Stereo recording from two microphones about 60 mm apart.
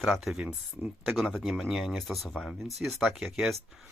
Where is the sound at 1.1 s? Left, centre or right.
Centre.